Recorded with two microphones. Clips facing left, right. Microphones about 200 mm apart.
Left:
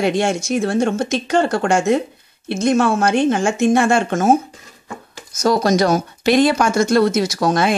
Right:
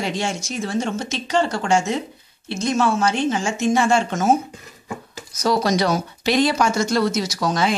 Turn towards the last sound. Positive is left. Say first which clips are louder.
# left 4 dB
turn(degrees=55)  # may be behind; listen again after turning